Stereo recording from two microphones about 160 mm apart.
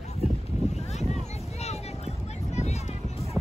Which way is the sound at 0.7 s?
45° left (ahead or behind).